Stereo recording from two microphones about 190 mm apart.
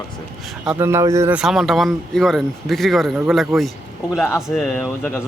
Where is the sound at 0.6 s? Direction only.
10° right (ahead or behind).